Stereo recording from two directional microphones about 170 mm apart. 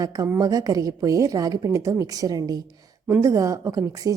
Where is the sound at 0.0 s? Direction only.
20° right (ahead or behind).